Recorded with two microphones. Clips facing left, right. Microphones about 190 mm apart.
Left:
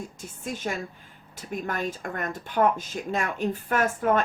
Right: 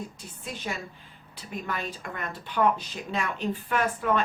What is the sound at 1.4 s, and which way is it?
A woman's voice, 45° left (ahead or behind).